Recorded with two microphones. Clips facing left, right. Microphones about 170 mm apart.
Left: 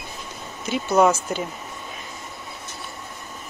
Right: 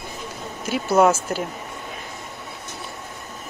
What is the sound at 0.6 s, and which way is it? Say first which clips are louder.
Speech: right 1 dB; 5° right (ahead or behind).